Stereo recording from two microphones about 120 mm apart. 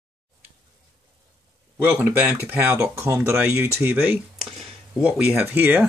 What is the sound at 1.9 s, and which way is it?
Speech, 15° right (ahead or behind).